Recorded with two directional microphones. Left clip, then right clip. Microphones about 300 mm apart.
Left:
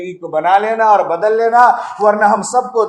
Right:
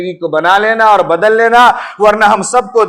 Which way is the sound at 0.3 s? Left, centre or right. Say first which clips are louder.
Right 3 dB; right.